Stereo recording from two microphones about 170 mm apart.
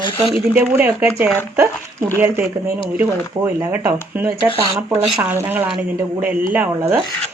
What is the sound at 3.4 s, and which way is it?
Speech, 20° right (ahead or behind).